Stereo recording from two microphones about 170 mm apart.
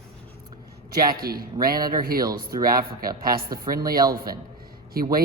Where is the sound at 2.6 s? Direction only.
60° right (ahead or behind).